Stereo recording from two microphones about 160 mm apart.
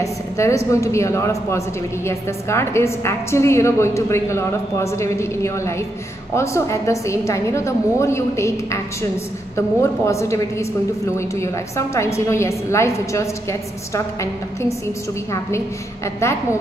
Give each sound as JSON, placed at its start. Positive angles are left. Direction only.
{"t": 0.0, "sound": "a woman's voice", "side_deg": 20}